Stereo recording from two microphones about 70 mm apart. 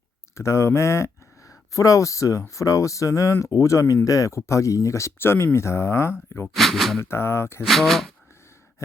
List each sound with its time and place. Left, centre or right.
0.3 s speech: left
6.6 s speech: centre
7.0 s speech: left
7.6 s speech: centre